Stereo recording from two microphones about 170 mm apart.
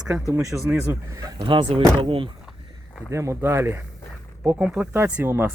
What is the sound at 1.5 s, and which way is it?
Speech, 30° right (ahead or behind).